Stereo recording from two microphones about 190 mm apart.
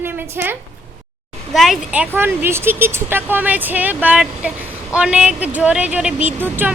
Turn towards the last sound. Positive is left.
turn(degrees=-10)  # may be behind; listen again after turning